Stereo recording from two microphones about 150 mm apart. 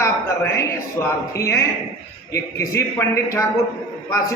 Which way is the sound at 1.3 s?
20° left (ahead or behind).